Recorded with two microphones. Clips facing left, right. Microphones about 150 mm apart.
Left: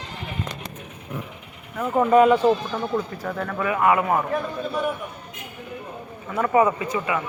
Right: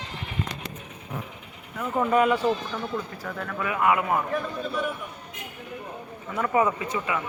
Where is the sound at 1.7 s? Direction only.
20° left (ahead or behind).